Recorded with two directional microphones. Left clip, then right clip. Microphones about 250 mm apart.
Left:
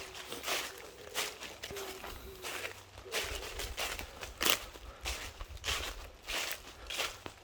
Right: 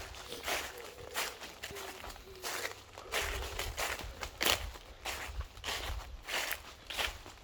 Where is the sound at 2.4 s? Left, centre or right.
Centre.